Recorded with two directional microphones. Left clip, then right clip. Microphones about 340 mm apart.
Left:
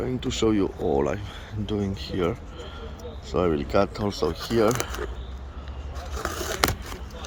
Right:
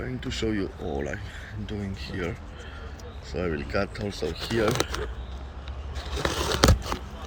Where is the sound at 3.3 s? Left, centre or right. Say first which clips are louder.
Left 7 dB; left.